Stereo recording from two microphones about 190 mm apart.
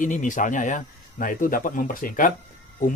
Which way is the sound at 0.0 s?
40° left (ahead or behind).